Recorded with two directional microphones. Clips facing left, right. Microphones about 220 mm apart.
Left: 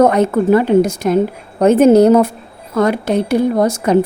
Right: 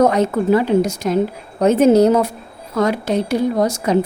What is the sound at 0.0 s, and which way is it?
Speech, 55° left (ahead or behind).